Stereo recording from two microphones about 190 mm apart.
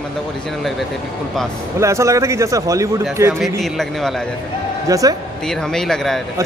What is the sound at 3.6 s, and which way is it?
Speech, centre (ahead or behind).